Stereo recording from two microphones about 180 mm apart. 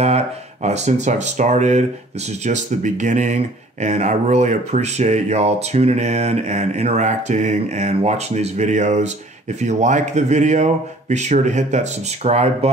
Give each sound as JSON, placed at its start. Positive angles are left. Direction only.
{"t": 0.0, "sound": "speech", "side_deg": -40}